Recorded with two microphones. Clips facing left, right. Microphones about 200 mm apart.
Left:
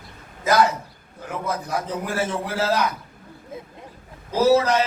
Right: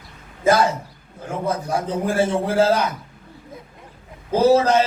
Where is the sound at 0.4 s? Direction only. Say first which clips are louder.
Right 2 dB; 25° right (ahead or behind).